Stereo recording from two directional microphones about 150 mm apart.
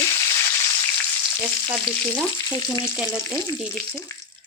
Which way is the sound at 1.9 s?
35° right (ahead or behind).